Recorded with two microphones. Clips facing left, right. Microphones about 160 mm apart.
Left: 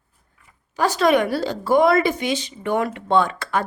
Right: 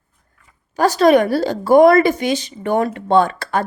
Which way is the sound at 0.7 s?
40° right (ahead or behind).